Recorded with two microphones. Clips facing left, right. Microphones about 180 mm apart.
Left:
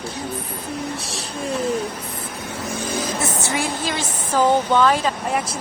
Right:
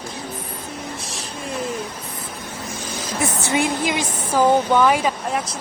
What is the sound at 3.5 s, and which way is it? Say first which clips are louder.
A woman's voice: right 3 dB; 20° right (ahead or behind).